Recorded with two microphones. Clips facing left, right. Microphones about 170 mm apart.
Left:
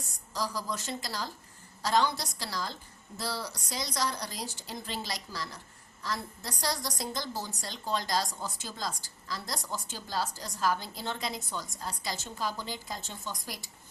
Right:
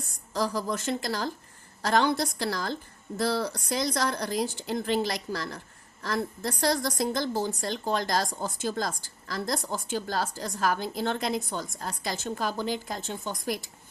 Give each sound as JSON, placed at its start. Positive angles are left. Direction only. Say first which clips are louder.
{"t": 0.3, "sound": "a woman's voice", "louder": "right 6 dB", "side_deg": -55}